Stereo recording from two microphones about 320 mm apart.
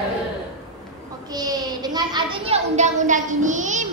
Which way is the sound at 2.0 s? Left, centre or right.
Centre.